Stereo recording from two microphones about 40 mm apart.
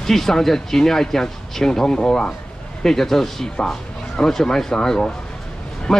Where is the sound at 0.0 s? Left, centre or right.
Centre.